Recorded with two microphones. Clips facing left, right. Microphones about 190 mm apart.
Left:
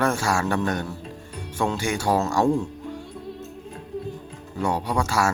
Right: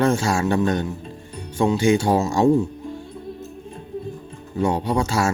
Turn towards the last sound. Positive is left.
turn(degrees=-20)  # may be behind; listen again after turning